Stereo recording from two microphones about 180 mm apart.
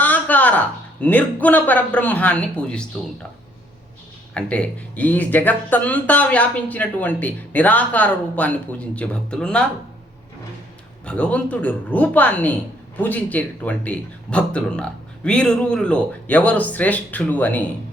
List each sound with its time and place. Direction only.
0.0 s a man's voice: 10° left (ahead or behind)
4.4 s speech: 5° left (ahead or behind)
11.0 s speech: 5° left (ahead or behind)